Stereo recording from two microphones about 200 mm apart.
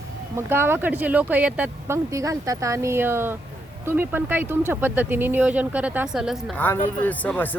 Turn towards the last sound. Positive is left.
turn(degrees=10)  # may be behind; listen again after turning